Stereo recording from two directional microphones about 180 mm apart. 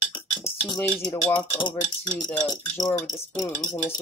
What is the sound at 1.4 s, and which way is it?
Speech, 25° left (ahead or behind).